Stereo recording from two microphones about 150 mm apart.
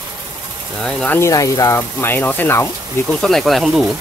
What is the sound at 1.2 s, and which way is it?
Speech, 20° left (ahead or behind).